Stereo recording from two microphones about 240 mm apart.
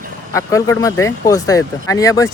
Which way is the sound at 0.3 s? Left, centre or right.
Centre.